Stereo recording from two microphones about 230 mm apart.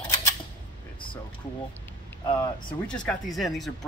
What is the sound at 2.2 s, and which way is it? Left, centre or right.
Speech, left.